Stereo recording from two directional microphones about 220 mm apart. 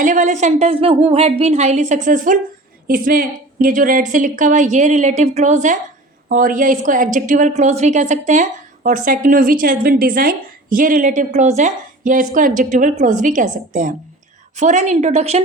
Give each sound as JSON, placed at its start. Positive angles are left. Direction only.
{"t": 0.0, "sound": "a woman's voice", "side_deg": -35}